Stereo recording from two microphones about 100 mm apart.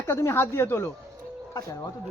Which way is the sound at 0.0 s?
25° left (ahead or behind).